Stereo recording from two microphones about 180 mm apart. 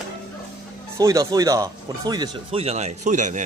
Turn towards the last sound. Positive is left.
turn(degrees=-45)  # may be behind; listen again after turning